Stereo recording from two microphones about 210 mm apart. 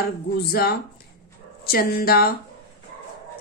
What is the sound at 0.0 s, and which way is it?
A woman's voice, 45° left (ahead or behind).